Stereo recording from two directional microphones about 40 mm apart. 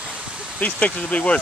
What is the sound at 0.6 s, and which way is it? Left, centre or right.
Speech, left.